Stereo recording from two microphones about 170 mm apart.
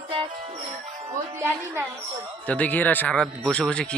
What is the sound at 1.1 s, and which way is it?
Speech, 15° right (ahead or behind).